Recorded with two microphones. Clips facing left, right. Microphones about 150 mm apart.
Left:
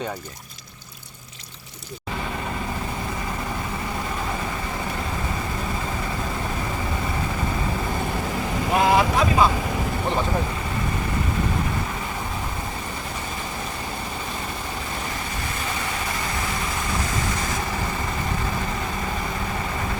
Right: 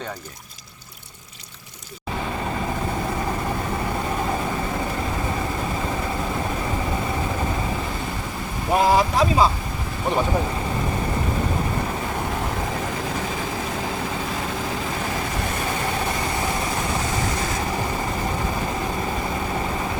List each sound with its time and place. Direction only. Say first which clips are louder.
9.0 s vehicle: right 1 dB; 35° right (ahead or behind)